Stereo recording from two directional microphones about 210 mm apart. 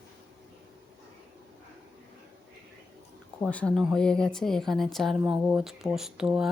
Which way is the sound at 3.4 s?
5° left (ahead or behind).